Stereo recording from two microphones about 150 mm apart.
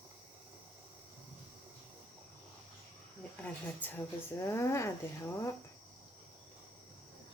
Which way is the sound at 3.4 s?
10° left (ahead or behind).